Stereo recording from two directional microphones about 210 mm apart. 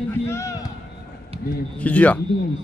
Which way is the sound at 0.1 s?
15° left (ahead or behind).